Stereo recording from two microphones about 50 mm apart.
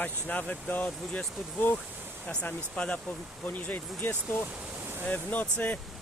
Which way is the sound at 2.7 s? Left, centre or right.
Left.